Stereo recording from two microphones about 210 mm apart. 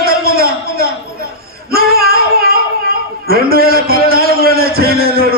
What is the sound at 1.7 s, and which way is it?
Child singing, 45° right (ahead or behind).